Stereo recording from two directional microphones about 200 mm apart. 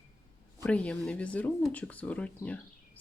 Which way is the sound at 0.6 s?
5° left (ahead or behind).